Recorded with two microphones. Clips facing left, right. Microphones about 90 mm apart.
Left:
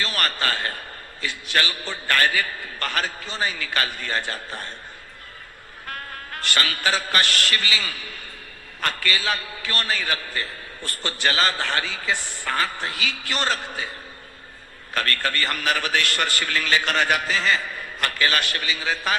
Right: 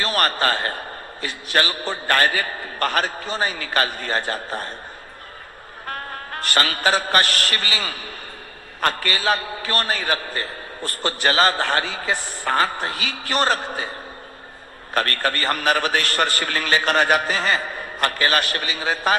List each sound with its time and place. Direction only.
0.0 s a man's voice: 35° right (ahead or behind)
5.8 s a man's voice: 35° right (ahead or behind)
14.9 s a man's voice: 35° right (ahead or behind)